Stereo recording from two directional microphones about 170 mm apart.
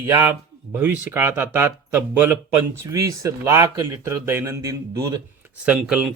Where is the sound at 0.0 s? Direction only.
15° right (ahead or behind).